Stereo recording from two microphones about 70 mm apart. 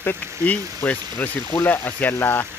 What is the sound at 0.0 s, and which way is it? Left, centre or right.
Speech, left.